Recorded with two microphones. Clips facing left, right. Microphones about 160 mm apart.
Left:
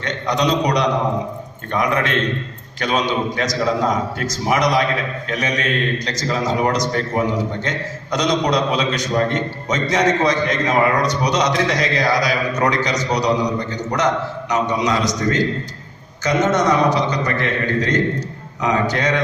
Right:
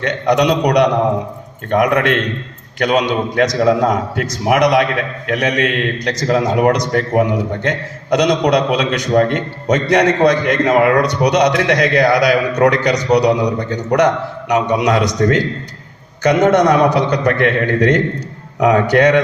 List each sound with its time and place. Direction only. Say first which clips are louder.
0.0 s a man's voice: right 6 dB; 65° right (ahead or behind)